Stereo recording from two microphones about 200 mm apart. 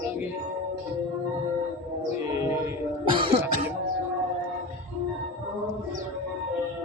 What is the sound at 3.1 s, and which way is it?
Cough, 25° right (ahead or behind).